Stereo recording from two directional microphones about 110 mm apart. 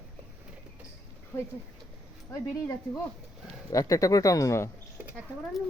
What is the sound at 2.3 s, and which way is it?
Speech, 30° left (ahead or behind).